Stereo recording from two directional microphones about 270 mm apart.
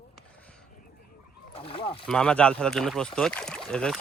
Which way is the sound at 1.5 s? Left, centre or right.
Centre.